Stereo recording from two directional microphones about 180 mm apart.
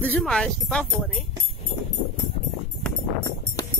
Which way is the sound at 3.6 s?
20° left (ahead or behind).